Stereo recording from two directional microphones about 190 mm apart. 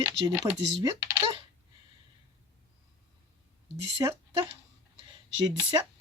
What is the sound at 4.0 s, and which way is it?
Speech, 15° right (ahead or behind).